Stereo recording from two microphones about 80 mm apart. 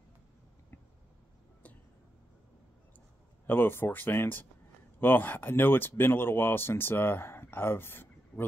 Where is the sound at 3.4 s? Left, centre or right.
Left.